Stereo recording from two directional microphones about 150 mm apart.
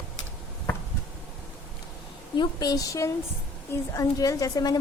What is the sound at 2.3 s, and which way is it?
A woman's voice, 30° left (ahead or behind).